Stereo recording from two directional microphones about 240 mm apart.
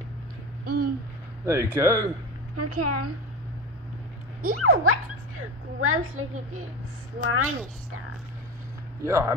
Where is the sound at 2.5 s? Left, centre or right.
Right.